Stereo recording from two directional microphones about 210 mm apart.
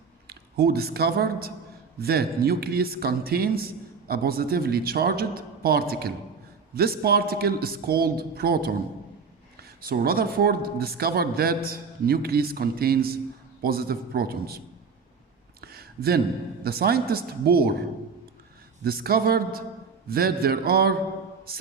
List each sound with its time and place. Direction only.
0.3 s speech: 50° right (ahead or behind)
9.8 s speech: 45° right (ahead or behind)
15.6 s a sound: 45° right (ahead or behind)
16.6 s speech: 45° right (ahead or behind)
18.9 s speech: 45° right (ahead or behind)